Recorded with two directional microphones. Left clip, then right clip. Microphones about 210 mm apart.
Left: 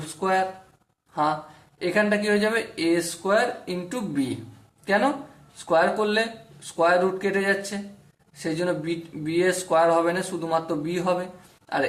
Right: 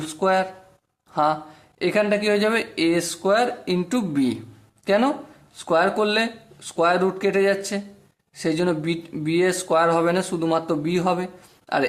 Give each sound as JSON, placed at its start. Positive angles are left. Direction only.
{"t": 0.0, "sound": "speech", "side_deg": -45}